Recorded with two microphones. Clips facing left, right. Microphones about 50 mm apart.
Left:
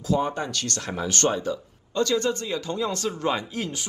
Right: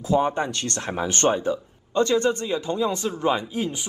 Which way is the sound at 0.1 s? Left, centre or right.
Right.